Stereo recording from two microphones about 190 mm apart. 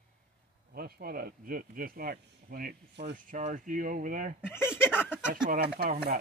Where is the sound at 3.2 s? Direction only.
45° right (ahead or behind).